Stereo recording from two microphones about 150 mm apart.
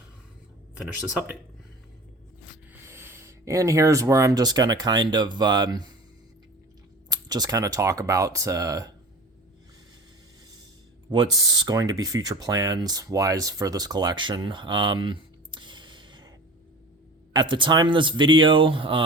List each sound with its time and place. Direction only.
0.8 s speech: 5° right (ahead or behind)
2.8 s speech: 15° right (ahead or behind)
7.1 s speech: 25° right (ahead or behind)
11.1 s speech: 30° right (ahead or behind)
17.3 s speech: 35° right (ahead or behind)